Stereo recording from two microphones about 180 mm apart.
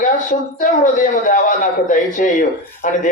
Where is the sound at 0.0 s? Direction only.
45° left (ahead or behind).